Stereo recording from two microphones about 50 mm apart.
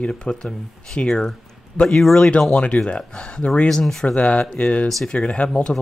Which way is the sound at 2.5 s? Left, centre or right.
Left.